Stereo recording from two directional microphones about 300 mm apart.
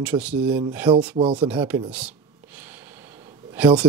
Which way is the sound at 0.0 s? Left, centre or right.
Centre.